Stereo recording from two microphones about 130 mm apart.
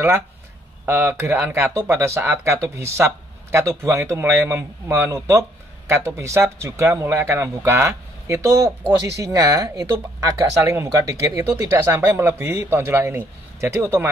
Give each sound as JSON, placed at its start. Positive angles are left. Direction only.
{"t": 0.8, "sound": "speech", "side_deg": -20}